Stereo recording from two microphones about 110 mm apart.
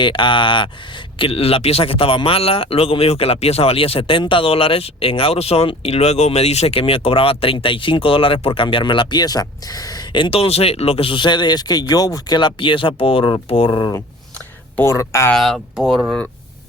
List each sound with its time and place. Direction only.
0.0 s speech: 50° left (ahead or behind)
1.2 s speech: 65° left (ahead or behind); by 13.9 s 40° left (ahead or behind)
14.8 s speech: 25° left (ahead or behind)
15.3 s speech: centre (ahead or behind)